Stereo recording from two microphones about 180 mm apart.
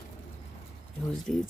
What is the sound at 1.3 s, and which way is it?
Speech, centre (ahead or behind).